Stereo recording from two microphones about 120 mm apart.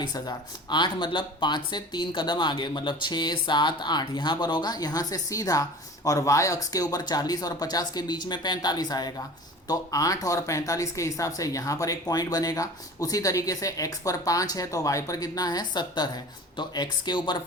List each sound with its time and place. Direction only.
0.0 s speech: 35° left (ahead or behind)